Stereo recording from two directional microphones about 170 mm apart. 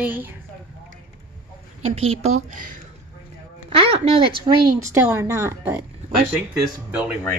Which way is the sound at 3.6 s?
35° right (ahead or behind).